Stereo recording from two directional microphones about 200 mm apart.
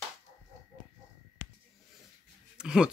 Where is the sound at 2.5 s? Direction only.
5° right (ahead or behind).